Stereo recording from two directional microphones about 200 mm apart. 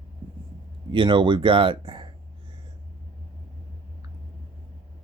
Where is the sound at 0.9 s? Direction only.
25° right (ahead or behind).